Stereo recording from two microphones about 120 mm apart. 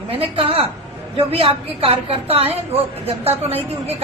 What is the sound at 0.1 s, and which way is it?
A woman's voice, 50° right (ahead or behind).